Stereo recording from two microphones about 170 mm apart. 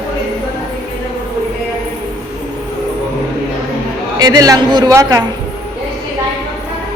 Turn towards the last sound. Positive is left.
turn(degrees=-20)  # may be behind; listen again after turning